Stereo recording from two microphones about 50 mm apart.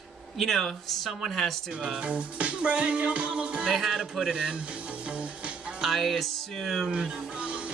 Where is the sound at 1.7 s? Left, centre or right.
Right.